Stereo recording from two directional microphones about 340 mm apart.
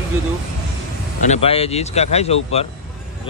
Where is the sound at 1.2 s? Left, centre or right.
Centre.